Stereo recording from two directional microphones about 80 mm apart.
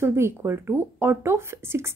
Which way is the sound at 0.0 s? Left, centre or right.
Right.